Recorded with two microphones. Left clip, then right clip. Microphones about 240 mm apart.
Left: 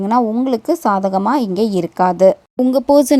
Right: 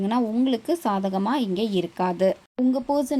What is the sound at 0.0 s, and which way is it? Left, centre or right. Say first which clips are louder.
A woman's voice: left 9 dB; left.